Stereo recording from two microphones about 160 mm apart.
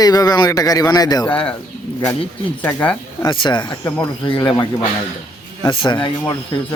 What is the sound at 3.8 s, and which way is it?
Speech, 15° left (ahead or behind).